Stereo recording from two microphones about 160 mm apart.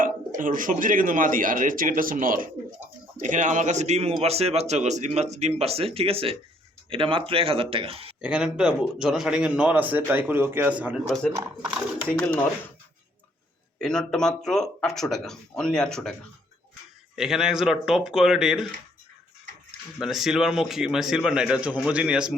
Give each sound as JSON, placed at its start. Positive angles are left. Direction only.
{"t": 0.3, "sound": "a man's voice", "side_deg": -55}
{"t": 8.2, "sound": "a man's voice", "side_deg": -5}
{"t": 13.8, "sound": "a man's voice", "side_deg": 5}
{"t": 17.2, "sound": "a man's voice", "side_deg": -5}
{"t": 20.0, "sound": "a man's voice", "side_deg": 0}